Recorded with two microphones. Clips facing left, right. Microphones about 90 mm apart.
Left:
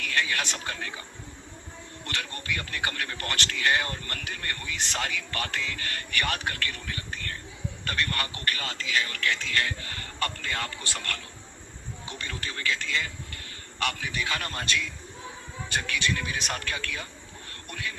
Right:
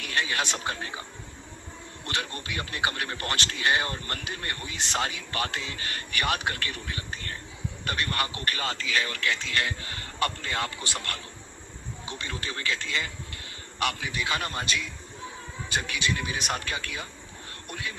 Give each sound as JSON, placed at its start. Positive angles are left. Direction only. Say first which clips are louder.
{"t": 0.0, "sound": "a man's voice", "louder": "even", "side_deg": -20}
{"t": 2.0, "sound": "a man's voice", "louder": "right 1 dB", "side_deg": -20}